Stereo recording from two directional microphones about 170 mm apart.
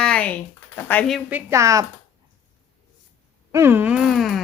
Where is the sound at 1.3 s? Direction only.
15° right (ahead or behind).